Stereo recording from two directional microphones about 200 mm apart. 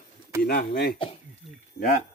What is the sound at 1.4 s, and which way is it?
Speech, centre (ahead or behind).